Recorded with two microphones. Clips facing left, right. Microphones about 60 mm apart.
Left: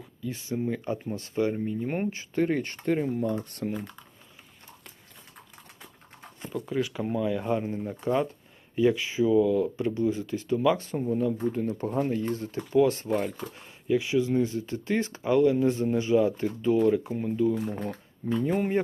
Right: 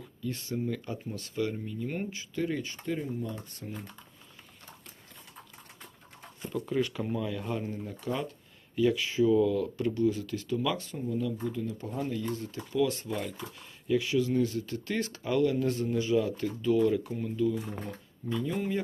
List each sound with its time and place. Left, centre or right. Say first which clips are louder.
0.0 s speech: left 1 dB; centre; by 3.8 s left
6.7 s speech: left 2 dB; centre; by 13.7 s left
13.8 s speech: left 3 dB; left
18.3 s speech: left 5 dB; left